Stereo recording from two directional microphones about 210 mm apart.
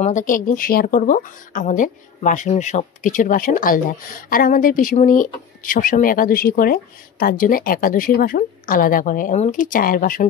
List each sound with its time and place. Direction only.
0.0 s speech: 40° left (ahead or behind)